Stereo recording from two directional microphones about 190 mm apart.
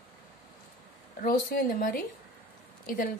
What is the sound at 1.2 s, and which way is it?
Speech, 50° left (ahead or behind).